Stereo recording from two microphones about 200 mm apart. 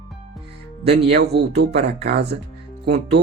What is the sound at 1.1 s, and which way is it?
Speech, 55° right (ahead or behind).